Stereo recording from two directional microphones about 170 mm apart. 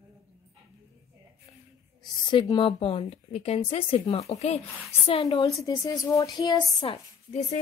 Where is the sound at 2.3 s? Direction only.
30° left (ahead or behind).